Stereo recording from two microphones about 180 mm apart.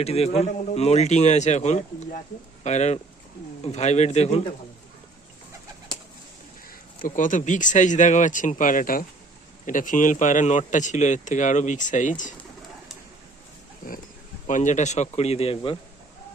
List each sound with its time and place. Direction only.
0.0 s speech: 35° left (ahead or behind)
6.7 s a man's voice: 50° left (ahead or behind)
14.4 s speech: 45° left (ahead or behind)